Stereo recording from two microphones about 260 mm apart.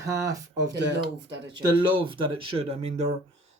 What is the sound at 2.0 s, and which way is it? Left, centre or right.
Speech, centre.